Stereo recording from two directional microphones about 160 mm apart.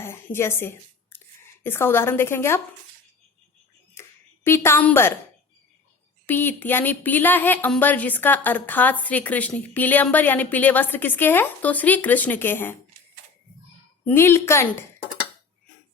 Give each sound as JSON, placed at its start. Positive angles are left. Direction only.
{"t": 0.0, "sound": "a sound", "side_deg": 15}
{"t": 1.6, "sound": "a woman's voice", "side_deg": 15}
{"t": 4.0, "sound": "a sound", "side_deg": 15}
{"t": 4.4, "sound": "a woman's voice", "side_deg": 15}
{"t": 6.2, "sound": "a woman's voice", "side_deg": 10}
{"t": 14.0, "sound": "a woman's voice", "side_deg": 15}